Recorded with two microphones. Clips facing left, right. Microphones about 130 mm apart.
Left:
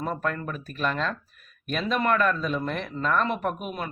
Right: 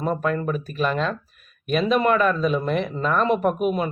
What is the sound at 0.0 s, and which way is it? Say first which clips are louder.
Speech: right 6 dB; 15° right (ahead or behind).